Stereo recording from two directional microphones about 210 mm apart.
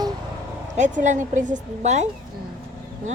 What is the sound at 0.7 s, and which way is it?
Speech, 35° right (ahead or behind).